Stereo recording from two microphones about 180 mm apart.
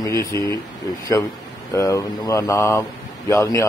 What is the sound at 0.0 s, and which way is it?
Speech, 15° left (ahead or behind).